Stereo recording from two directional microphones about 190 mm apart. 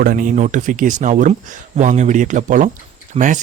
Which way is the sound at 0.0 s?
45° right (ahead or behind).